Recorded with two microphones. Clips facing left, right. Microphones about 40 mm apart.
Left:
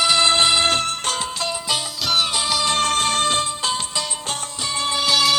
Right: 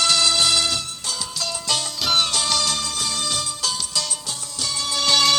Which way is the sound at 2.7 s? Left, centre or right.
Left.